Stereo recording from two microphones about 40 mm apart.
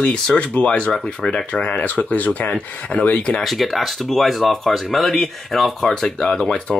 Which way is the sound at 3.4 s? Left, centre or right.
Centre.